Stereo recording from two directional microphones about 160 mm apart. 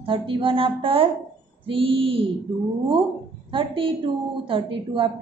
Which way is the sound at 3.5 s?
35° right (ahead or behind).